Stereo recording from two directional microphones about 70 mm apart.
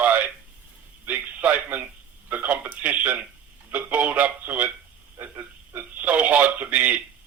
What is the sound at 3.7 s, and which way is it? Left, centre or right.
Speech, right.